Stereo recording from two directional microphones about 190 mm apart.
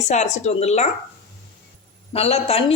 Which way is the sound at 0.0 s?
40° left (ahead or behind).